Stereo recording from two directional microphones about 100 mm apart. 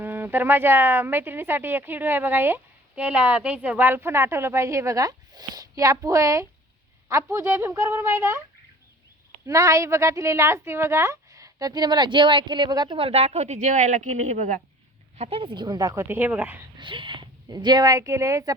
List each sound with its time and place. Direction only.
0.0 s a woman's voice: 20° right (ahead or behind)
9.5 s a woman's voice: 30° right (ahead or behind)
13.0 s a woman's voice: 85° right
15.2 s speech: 65° right (ahead or behind); by 16.0 s 35° right (ahead or behind)
16.0 s speech: 20° right (ahead or behind)
16.7 s speech: 55° right (ahead or behind); by 18.5 s 35° right (ahead or behind)